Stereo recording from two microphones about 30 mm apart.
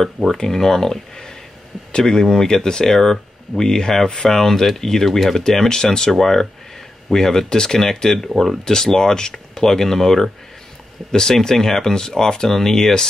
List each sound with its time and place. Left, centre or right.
0.5 s speech: centre
7.4 s speech: left